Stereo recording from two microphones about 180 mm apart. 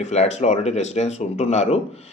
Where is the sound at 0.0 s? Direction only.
40° left (ahead or behind).